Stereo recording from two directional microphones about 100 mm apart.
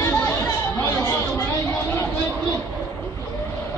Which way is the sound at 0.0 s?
25° left (ahead or behind).